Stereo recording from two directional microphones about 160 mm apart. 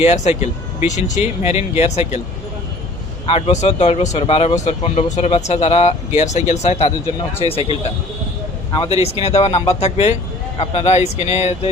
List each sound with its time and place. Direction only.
0.0 s speech: 45° left (ahead or behind)
3.2 s speech: 40° left (ahead or behind)